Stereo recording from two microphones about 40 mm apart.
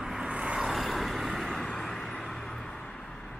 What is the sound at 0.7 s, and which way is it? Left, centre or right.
Vehicle, centre.